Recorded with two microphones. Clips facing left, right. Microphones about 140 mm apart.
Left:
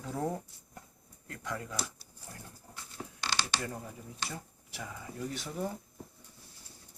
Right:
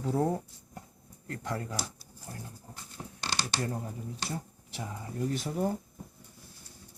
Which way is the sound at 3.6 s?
30° right (ahead or behind).